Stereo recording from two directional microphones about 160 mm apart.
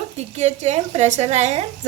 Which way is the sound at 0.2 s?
45° right (ahead or behind).